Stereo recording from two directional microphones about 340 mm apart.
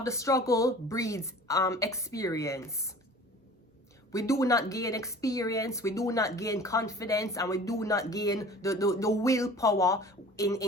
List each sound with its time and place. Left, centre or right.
0.0 s speech: centre
4.1 s speech: centre